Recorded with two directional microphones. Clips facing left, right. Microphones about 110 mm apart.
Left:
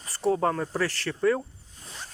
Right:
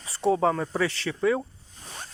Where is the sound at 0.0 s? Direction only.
Centre (ahead or behind).